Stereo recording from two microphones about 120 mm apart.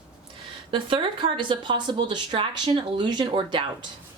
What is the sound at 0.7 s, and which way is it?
A woman's voice, 45° right (ahead or behind).